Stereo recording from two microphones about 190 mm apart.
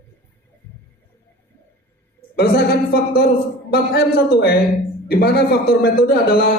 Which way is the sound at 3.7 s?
55° left (ahead or behind).